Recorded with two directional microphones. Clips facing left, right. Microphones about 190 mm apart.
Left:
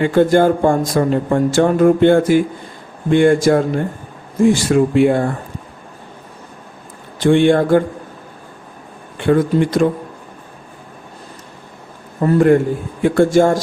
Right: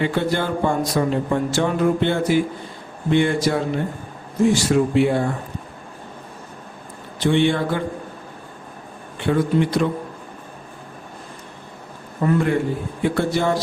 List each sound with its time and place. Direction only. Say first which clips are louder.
0.0 s speech: left 9 dB; 45° left (ahead or behind)
7.2 s speech: left 6 dB; 50° left (ahead or behind)
9.2 s speech: left 5 dB; 50° left (ahead or behind)
12.2 s a man's voice: left 7 dB; 40° left (ahead or behind)